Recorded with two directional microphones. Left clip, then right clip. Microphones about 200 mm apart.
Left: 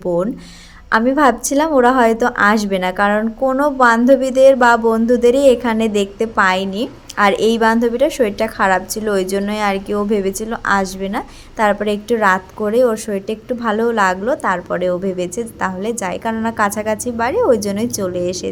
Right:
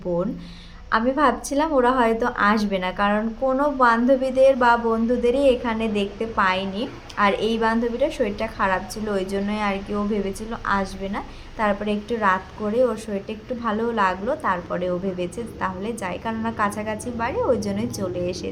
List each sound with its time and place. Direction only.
0.9 s a woman's voice: 45° left (ahead or behind)